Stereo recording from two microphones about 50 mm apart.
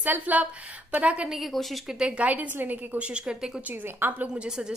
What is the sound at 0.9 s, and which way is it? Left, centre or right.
Speech, right.